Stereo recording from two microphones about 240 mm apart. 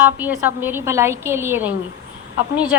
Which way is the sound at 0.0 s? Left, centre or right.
Centre.